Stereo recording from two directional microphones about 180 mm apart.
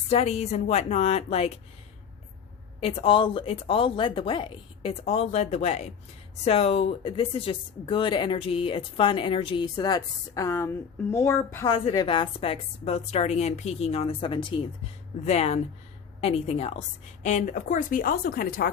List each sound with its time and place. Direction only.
0.1 s speech: 35° left (ahead or behind)
2.8 s speech: 30° left (ahead or behind); by 11.7 s 15° left (ahead or behind)
11.7 s speech: 30° left (ahead or behind)
15.2 s speech: 40° left (ahead or behind); by 18.7 s 55° left (ahead or behind)